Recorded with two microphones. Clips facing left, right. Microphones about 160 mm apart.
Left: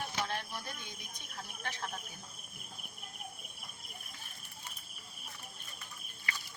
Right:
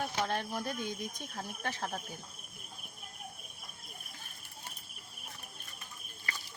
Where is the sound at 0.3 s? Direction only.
45° right (ahead or behind).